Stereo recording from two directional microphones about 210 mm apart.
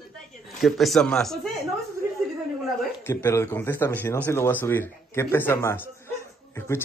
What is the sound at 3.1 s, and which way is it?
Speech, 10° left (ahead or behind).